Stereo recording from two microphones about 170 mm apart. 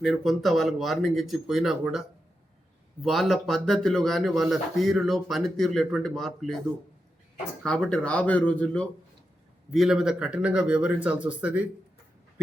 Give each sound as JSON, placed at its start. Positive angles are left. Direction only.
{"t": 0.0, "sound": "speech", "side_deg": 0}
{"t": 3.0, "sound": "speech", "side_deg": 0}
{"t": 7.6, "sound": "speech", "side_deg": 5}